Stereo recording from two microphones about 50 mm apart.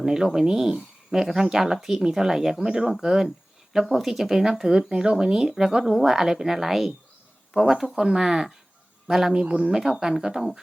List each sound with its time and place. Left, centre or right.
0.0 s speech: centre
9.4 s speech: right
9.8 s speech: centre